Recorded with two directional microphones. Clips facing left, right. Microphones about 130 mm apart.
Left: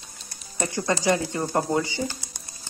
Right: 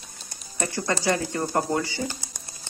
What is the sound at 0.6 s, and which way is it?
Speech, 20° left (ahead or behind).